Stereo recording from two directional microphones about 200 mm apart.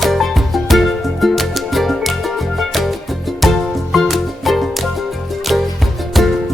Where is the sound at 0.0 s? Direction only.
Centre (ahead or behind).